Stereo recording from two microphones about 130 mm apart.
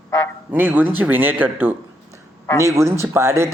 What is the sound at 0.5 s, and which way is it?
Speech, 15° right (ahead or behind).